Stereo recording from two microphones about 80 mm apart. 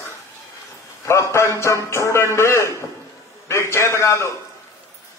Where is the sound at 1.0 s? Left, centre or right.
Left.